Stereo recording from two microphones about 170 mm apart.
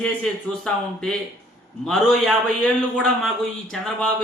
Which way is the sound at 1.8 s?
5° left (ahead or behind).